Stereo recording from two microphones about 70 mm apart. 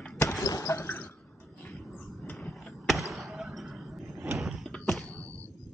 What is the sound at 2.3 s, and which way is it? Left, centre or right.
Basketball bounce, centre.